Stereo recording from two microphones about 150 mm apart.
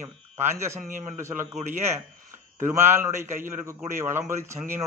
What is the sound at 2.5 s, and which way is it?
A man's voice, 15° right (ahead or behind).